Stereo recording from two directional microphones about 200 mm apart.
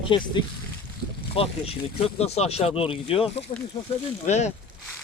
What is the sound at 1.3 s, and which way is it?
Speech, 30° left (ahead or behind).